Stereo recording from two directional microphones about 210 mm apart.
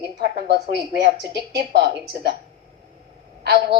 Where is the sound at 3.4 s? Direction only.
50° right (ahead or behind).